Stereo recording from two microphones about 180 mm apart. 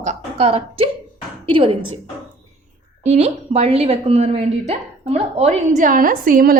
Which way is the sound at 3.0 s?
35° right (ahead or behind).